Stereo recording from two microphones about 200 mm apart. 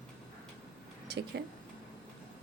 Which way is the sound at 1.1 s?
55° right (ahead or behind).